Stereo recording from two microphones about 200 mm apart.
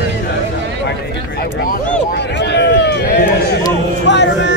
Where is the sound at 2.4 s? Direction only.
60° left (ahead or behind).